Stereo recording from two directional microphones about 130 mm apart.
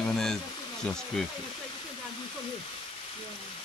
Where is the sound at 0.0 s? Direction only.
5° left (ahead or behind).